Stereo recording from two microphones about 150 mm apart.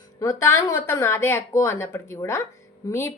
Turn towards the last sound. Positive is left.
turn(degrees=20)  # may be behind; listen again after turning